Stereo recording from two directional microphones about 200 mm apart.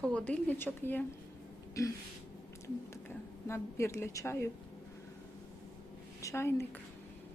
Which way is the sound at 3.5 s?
15° left (ahead or behind).